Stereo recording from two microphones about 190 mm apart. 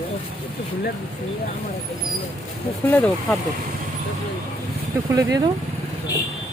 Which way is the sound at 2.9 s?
10° left (ahead or behind).